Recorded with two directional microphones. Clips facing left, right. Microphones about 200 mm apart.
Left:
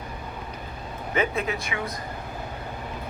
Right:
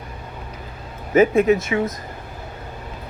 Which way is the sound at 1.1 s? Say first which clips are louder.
Right 12 dB; 45° right (ahead or behind).